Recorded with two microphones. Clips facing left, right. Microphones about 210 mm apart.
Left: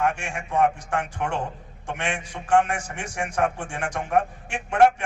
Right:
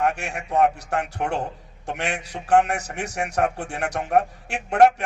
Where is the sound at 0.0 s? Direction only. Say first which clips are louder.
Right 1 dB; 40° right (ahead or behind).